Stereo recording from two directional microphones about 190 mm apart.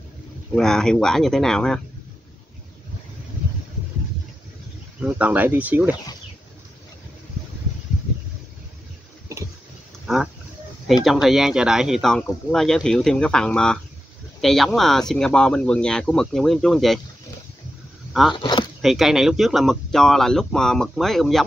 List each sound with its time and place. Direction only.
0.6 s speech: 5° left (ahead or behind)
5.0 s speech: 10° right (ahead or behind)
10.0 s roaring cats: centre (ahead or behind)
11.1 s speech: centre (ahead or behind)
18.3 s speech: 25° left (ahead or behind)
18.8 s speech: centre (ahead or behind)